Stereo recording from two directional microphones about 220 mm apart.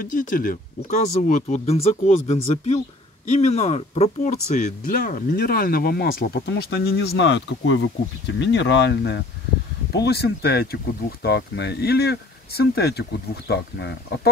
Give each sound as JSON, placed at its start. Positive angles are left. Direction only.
{"t": 0.0, "sound": "speech", "side_deg": 40}
{"t": 4.6, "sound": "speech", "side_deg": 40}